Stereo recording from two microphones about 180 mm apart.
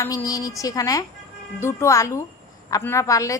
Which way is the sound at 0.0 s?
20° left (ahead or behind).